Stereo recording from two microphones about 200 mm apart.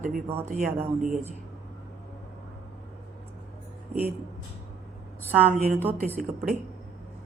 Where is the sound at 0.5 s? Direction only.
40° right (ahead or behind).